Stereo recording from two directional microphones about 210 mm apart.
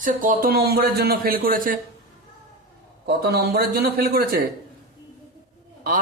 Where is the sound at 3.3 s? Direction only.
50° right (ahead or behind).